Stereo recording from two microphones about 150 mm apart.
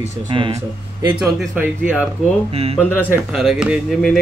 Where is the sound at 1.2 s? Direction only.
5° right (ahead or behind).